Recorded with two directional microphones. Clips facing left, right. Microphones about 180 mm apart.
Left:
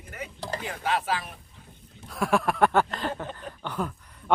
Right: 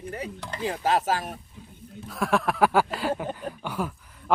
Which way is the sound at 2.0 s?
Centre (ahead or behind).